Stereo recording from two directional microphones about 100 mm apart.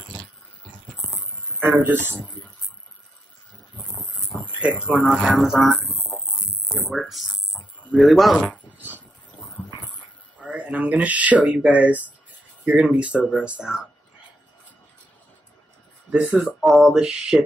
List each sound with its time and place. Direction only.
1.6 s speech: 20° right (ahead or behind)
4.5 s speech: 10° right (ahead or behind)
7.5 s a sound: centre (ahead or behind)
8.7 s a sound: 20° right (ahead or behind)
10.4 s speech: 10° right (ahead or behind)
16.1 s speech: 10° right (ahead or behind)